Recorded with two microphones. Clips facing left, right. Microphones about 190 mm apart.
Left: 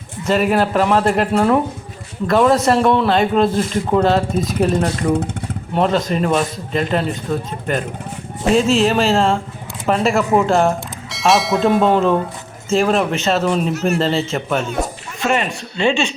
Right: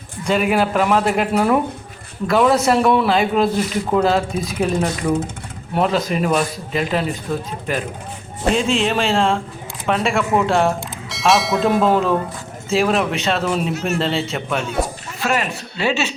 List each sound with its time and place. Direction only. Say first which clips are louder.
0.3 s a man's voice: left 2 dB; centre (ahead or behind)
8.5 s a man's voice: left 5 dB; centre (ahead or behind)
15.2 s speech: left 2 dB; 25° left (ahead or behind)
15.8 s a man's voice: left 3 dB; 5° right (ahead or behind)